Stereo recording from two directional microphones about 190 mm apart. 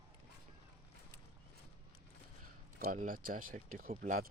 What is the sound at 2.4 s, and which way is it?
Speech, 45° right (ahead or behind).